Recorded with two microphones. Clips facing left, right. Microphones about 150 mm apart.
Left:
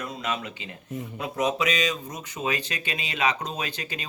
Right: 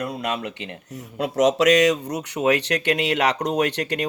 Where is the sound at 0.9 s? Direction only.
85° right.